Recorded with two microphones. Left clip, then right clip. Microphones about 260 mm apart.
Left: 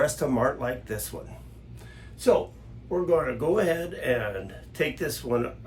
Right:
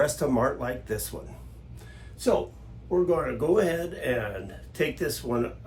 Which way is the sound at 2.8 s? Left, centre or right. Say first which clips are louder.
Left 1 dB; centre.